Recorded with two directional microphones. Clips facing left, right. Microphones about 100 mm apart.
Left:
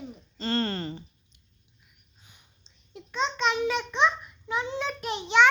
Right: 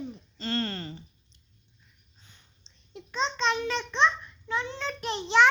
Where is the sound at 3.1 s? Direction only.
5° left (ahead or behind).